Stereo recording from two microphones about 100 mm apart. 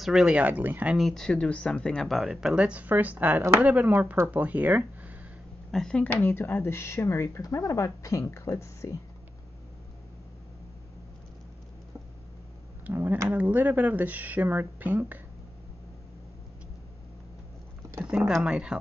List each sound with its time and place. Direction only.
0.0 s speech: 5° right (ahead or behind)
0.9 s speech: 5° left (ahead or behind); by 5.1 s 15° right (ahead or behind)
5.7 s speech: 5° left (ahead or behind)
6.3 s speech: 20° left (ahead or behind)
12.8 s speech: 20° right (ahead or behind)
18.0 s speech: 10° right (ahead or behind)